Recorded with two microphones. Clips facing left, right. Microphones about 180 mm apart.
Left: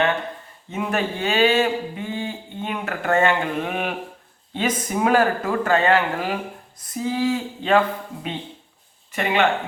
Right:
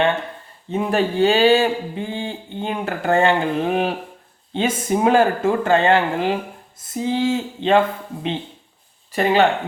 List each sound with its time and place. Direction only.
0.7 s speech: 30° right (ahead or behind)